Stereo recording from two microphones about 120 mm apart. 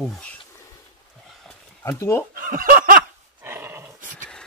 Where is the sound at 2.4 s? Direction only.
90° right.